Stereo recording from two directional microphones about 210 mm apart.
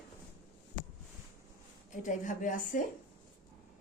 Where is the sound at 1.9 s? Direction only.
40° left (ahead or behind).